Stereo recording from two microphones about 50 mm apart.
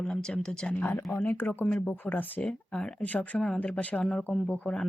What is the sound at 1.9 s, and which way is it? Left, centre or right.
Speech, left.